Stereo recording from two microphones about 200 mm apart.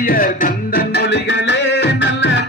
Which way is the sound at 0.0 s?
45° left (ahead or behind).